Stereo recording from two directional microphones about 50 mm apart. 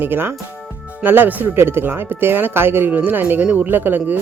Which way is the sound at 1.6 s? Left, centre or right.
Right.